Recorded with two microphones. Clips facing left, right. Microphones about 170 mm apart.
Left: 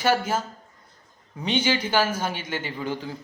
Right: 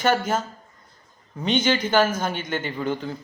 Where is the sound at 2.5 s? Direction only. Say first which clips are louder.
Right 3 dB; 55° right (ahead or behind).